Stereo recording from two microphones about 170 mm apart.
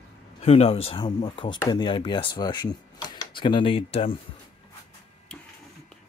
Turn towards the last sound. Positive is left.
turn(degrees=35)  # may be behind; listen again after turning